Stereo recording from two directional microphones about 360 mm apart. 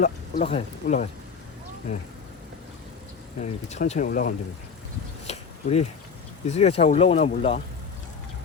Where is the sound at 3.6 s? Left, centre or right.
Centre.